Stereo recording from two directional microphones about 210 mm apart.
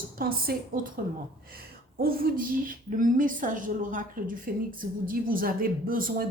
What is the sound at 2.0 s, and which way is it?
Speech, 45° right (ahead or behind).